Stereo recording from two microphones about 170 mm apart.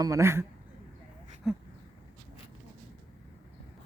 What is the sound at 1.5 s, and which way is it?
Speech, centre (ahead or behind).